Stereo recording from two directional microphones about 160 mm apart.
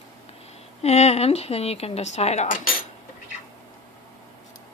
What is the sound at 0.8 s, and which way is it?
Speech, 45° left (ahead or behind).